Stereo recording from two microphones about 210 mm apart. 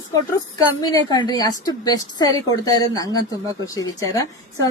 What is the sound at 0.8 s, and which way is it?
A woman's voice, 20° left (ahead or behind).